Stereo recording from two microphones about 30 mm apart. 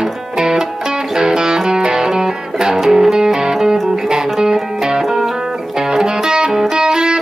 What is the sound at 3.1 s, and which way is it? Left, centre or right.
Music, right.